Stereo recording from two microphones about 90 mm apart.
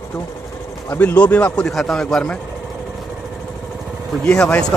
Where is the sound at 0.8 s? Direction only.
20° left (ahead or behind).